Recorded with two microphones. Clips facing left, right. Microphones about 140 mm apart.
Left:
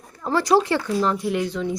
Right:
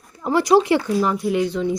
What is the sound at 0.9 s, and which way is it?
Speech, 5° right (ahead or behind).